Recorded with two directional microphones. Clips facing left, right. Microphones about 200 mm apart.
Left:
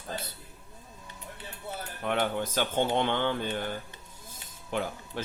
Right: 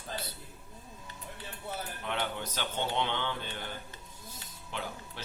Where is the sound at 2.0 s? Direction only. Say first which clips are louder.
Left 8 dB; 50° left (ahead or behind).